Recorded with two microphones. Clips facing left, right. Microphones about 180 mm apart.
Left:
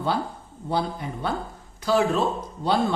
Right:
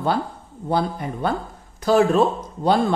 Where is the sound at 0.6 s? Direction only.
50° right (ahead or behind).